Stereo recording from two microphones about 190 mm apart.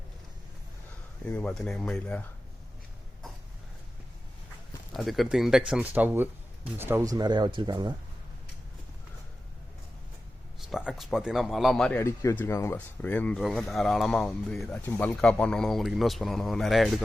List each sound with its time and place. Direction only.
1.3 s a man's voice: 5° left (ahead or behind)
4.9 s a man's voice: centre (ahead or behind); by 7.9 s 25° right (ahead or behind)
10.6 s a man's voice: centre (ahead or behind)